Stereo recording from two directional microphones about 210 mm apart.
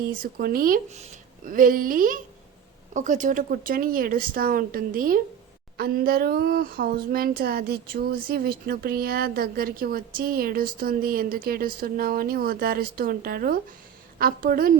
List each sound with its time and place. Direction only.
0.0 s speech: 45° right (ahead or behind)